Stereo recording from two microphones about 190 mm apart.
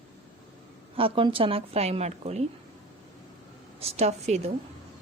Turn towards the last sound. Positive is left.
turn(degrees=-35)  # may be behind; listen again after turning